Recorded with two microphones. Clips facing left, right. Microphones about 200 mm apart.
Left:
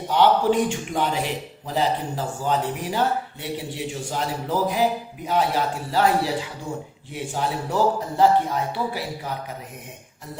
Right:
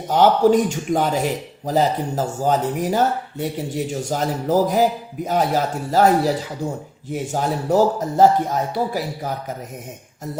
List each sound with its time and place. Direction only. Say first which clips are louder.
0.1 s speech: right 4 dB; 45° right (ahead or behind)